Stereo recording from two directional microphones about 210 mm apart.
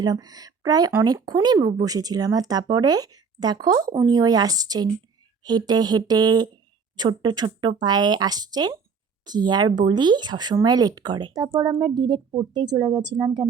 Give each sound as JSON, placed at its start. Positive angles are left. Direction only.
{"t": 0.0, "sound": "speech", "side_deg": -20}